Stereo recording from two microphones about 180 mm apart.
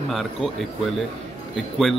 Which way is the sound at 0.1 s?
Centre (ahead or behind).